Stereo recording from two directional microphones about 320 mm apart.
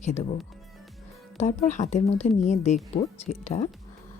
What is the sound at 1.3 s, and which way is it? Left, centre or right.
Speech, left.